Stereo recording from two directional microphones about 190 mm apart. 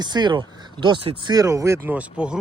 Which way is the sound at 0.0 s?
20° right (ahead or behind).